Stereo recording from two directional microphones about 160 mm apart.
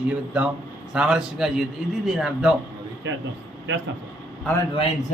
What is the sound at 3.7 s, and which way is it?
Speech, 90° right.